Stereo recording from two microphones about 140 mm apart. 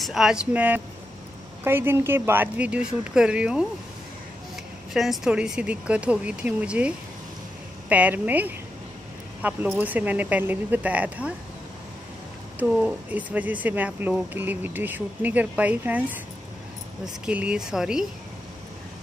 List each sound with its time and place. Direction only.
0.0 s speech: 5° right (ahead or behind)
4.9 s speech: 5° right (ahead or behind)
7.9 s speech: 10° right (ahead or behind)
12.5 s speech: 10° right (ahead or behind)